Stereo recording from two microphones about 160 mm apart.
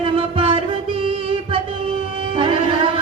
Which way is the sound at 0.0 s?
35° right (ahead or behind).